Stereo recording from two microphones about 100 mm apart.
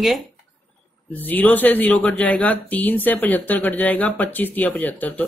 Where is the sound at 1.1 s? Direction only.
15° left (ahead or behind).